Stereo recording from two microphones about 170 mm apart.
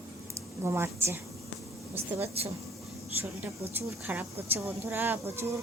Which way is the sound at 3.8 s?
10° right (ahead or behind).